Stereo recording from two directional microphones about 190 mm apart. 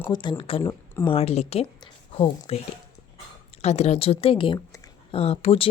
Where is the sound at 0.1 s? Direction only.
25° left (ahead or behind).